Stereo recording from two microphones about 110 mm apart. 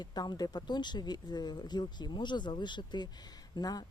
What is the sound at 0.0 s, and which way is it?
Speech, 40° left (ahead or behind).